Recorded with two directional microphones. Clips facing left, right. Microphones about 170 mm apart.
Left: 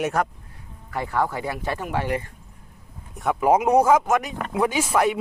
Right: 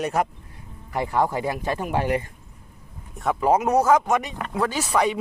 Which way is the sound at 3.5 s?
15° left (ahead or behind).